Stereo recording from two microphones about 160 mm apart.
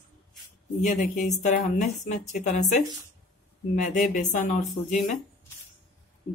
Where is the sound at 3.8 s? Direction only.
50° left (ahead or behind).